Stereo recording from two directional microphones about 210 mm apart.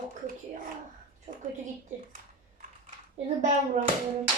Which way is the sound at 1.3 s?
40° right (ahead or behind).